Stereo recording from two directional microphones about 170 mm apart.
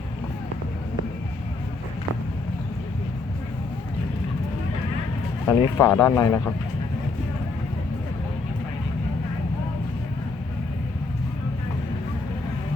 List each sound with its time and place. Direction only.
5.5 s speech: 10° left (ahead or behind)